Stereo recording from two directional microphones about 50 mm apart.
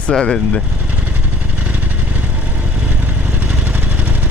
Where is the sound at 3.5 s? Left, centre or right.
Right.